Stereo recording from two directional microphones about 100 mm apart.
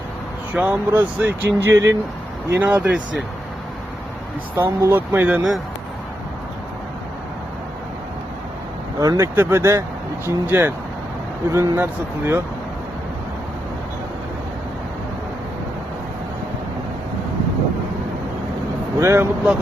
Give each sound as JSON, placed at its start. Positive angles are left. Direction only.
{"t": 0.5, "sound": "speech", "side_deg": -15}
{"t": 2.6, "sound": "speech", "side_deg": -15}
{"t": 4.5, "sound": "speech", "side_deg": -20}
{"t": 9.0, "sound": "speech", "side_deg": -35}
{"t": 11.5, "sound": "speech", "side_deg": -35}
{"t": 11.8, "sound": "speech", "side_deg": -20}
{"t": 18.9, "sound": "speech", "side_deg": -30}